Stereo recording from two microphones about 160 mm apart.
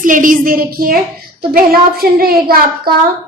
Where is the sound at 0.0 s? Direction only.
55° right (ahead or behind).